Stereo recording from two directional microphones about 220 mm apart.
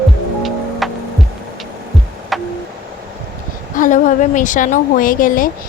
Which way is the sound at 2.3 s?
Centre (ahead or behind).